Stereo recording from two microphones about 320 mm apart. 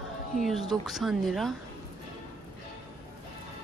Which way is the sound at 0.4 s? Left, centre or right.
Centre.